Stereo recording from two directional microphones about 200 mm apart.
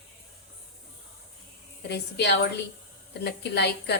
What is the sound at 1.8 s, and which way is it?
A woman's voice, 55° left (ahead or behind).